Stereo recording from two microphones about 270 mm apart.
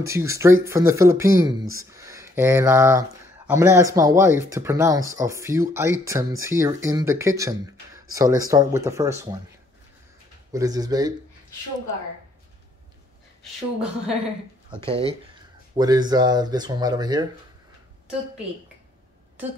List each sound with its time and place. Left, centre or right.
0.0 s speech: centre
10.5 s speech: centre
13.4 s speech: centre
14.9 s speech: right